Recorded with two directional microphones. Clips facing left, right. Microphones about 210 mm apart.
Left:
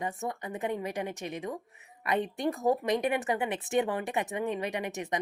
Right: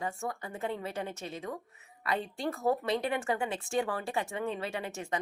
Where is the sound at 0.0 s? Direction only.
20° left (ahead or behind).